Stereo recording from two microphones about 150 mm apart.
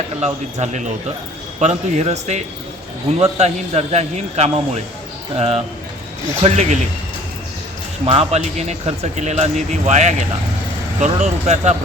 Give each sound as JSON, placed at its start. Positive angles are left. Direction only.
{"t": 0.2, "sound": "speech", "side_deg": -50}
{"t": 8.0, "sound": "speech", "side_deg": -45}